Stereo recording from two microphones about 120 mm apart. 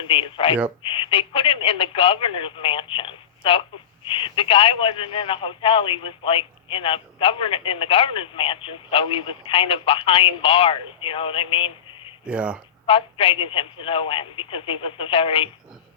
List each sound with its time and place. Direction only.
0.1 s a man's voice: 45° left (ahead or behind)
12.2 s speech: 10° right (ahead or behind)
12.8 s a man's voice: 50° left (ahead or behind)